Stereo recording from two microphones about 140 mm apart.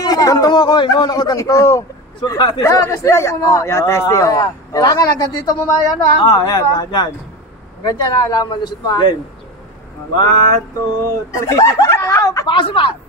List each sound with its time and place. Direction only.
0.0 s a man's voice: 25° left (ahead or behind)
11.1 s a man's voice: 20° left (ahead or behind); by 12.9 s 40° left (ahead or behind)